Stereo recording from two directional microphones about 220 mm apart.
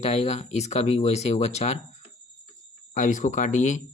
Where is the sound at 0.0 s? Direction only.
30° left (ahead or behind).